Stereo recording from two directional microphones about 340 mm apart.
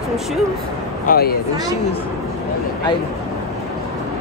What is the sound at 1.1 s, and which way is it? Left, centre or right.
Speech, left.